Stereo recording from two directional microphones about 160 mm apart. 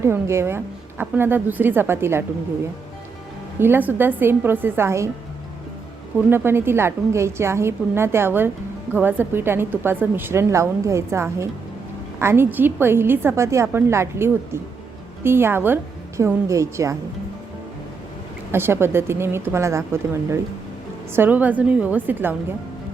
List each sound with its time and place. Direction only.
0.0 s a woman's voice: 15° right (ahead or behind)
3.6 s a woman's voice: 10° right (ahead or behind)
6.3 s a woman's voice: 15° right (ahead or behind)
18.5 s a woman's voice: 15° right (ahead or behind)